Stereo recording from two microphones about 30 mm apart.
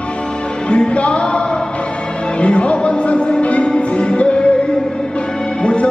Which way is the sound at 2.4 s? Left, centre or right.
Left.